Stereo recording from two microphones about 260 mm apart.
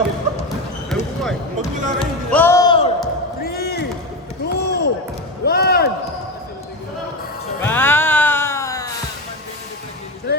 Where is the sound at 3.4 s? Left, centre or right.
Left.